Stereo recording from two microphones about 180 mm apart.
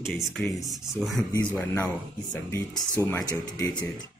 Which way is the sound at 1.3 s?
15° left (ahead or behind).